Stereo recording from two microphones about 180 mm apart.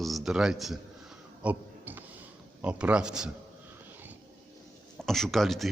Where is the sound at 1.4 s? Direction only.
10° right (ahead or behind).